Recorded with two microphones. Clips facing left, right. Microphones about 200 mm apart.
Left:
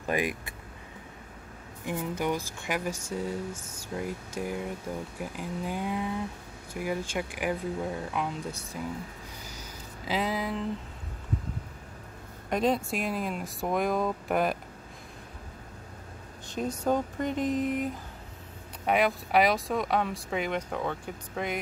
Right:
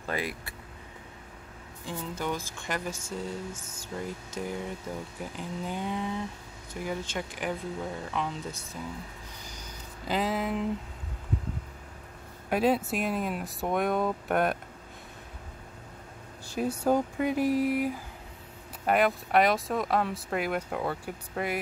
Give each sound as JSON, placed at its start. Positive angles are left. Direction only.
{"t": 0.0, "sound": "speech", "side_deg": 15}
{"t": 1.9, "sound": "speech", "side_deg": 15}
{"t": 9.5, "sound": "a sound", "side_deg": 5}
{"t": 12.4, "sound": "speech", "side_deg": -5}
{"t": 16.4, "sound": "speech", "side_deg": -10}